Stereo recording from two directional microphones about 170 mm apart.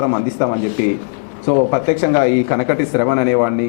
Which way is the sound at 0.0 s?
15° left (ahead or behind).